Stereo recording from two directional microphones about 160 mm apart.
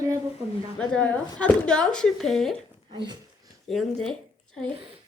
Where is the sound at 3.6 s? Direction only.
Centre (ahead or behind).